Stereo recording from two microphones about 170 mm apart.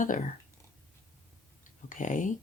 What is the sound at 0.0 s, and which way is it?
Speech, 50° left (ahead or behind).